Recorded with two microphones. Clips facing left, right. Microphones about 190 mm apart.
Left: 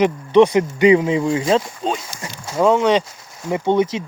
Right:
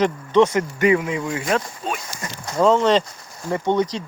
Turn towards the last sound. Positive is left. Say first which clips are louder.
# left 3 dB
turn(degrees=10)  # may be behind; listen again after turning